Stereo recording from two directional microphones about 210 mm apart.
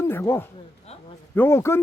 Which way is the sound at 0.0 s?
10° left (ahead or behind).